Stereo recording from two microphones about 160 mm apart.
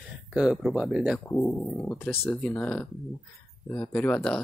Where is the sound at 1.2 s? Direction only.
20° left (ahead or behind).